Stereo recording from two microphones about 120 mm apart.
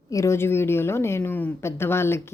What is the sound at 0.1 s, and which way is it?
A woman's voice, 25° left (ahead or behind).